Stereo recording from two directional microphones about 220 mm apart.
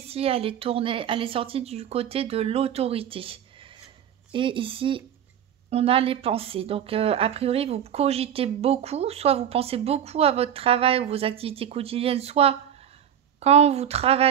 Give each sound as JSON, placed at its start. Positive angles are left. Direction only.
{"t": 0.1, "sound": "speech", "side_deg": -25}